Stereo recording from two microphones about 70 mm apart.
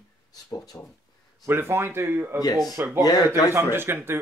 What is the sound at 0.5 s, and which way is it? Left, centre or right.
Speech, left.